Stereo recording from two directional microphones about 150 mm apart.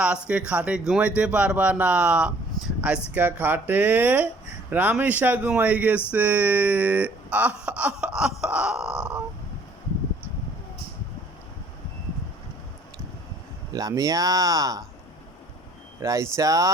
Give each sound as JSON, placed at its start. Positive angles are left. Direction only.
{"t": 0.0, "sound": "speech", "side_deg": -5}
{"t": 2.6, "sound": "a sound", "side_deg": 5}
{"t": 3.2, "sound": "speech", "side_deg": -10}
{"t": 8.4, "sound": "grunt", "side_deg": -5}
{"t": 13.7, "sound": "speech", "side_deg": -25}
{"t": 16.0, "sound": "speech", "side_deg": -20}